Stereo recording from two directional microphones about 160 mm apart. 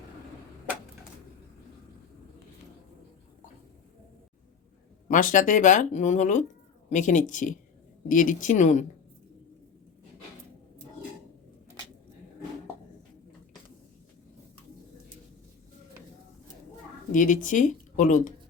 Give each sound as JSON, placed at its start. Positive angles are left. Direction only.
{"t": 5.0, "sound": "speech", "side_deg": 55}
{"t": 17.1, "sound": "speech", "side_deg": 55}